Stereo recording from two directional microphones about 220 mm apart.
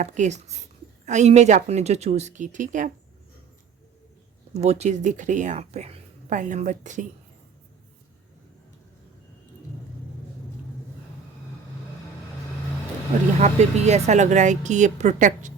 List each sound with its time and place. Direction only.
0.0 s speech: 35° right (ahead or behind)
4.5 s speech: 30° right (ahead or behind)
13.4 s speech: 30° right (ahead or behind)